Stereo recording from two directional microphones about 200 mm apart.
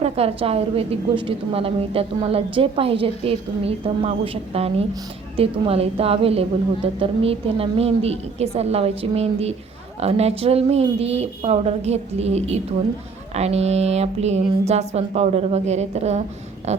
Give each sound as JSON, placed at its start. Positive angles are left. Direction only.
{"t": 0.0, "sound": "a woman's voice", "side_deg": -30}